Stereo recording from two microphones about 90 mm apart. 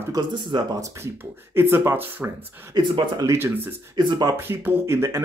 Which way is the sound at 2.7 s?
50° right (ahead or behind).